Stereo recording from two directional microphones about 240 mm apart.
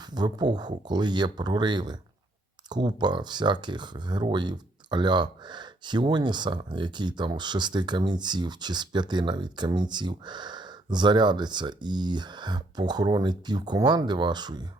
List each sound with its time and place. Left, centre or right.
0.1 s speech: centre